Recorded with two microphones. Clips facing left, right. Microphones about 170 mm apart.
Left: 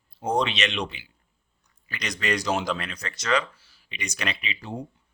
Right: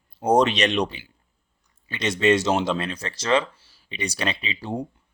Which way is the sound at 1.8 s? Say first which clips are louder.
Right 9 dB; 25° right (ahead or behind).